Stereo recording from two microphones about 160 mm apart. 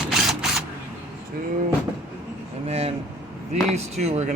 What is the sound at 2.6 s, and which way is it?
Air conditioning, 40° right (ahead or behind).